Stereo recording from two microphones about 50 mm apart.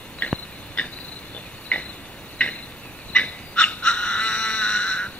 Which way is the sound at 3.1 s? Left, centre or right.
Left.